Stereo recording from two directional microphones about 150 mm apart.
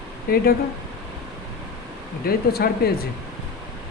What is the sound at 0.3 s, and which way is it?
Speech, 80° left.